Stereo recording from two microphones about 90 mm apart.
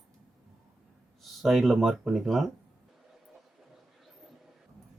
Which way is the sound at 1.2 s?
Centre (ahead or behind).